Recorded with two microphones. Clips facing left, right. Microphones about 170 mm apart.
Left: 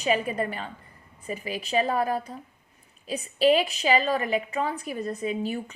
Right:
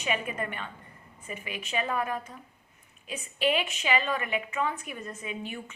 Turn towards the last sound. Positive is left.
turn(degrees=35)  # may be behind; listen again after turning